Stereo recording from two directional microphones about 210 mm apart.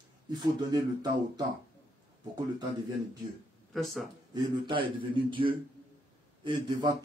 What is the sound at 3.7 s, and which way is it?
Speech, centre (ahead or behind).